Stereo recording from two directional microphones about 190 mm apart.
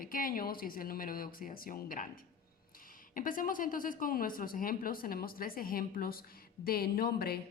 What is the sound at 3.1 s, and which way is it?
A woman's voice, 45° left (ahead or behind).